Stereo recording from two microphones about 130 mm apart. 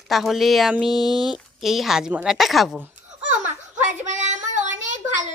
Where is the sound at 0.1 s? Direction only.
Centre (ahead or behind).